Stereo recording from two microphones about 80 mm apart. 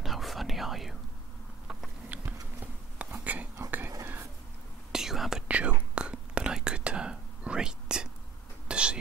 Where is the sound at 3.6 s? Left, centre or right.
Right.